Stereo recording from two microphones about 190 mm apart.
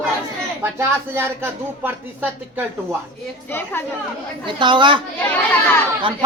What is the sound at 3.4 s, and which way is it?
Speech, 10° left (ahead or behind).